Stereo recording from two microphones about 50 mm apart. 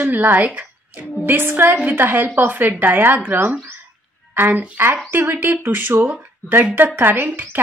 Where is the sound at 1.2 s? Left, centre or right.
Right.